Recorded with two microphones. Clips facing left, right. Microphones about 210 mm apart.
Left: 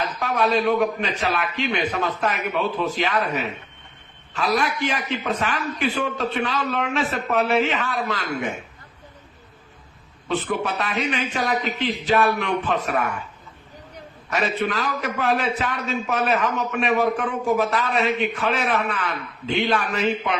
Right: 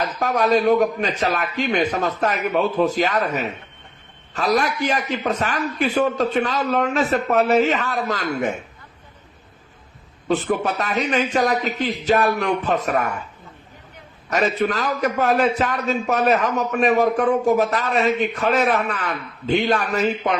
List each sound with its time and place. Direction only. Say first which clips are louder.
0.0 s a man's voice: right 2 dB; 45° right (ahead or behind)
4.4 s a man's voice: right 3 dB; 40° right (ahead or behind)
10.2 s a man's voice: right 4 dB; 40° right (ahead or behind)
14.3 s a man's voice: right 4 dB; 40° right (ahead or behind)